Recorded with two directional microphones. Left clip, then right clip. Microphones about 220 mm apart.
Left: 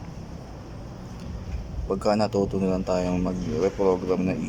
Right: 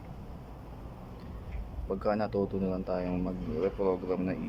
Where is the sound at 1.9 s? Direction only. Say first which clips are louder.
Left 7 dB; 5° left (ahead or behind).